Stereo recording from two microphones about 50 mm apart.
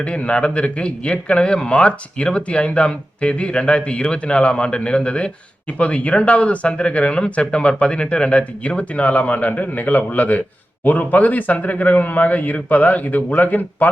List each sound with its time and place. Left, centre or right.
0.0 s speech: left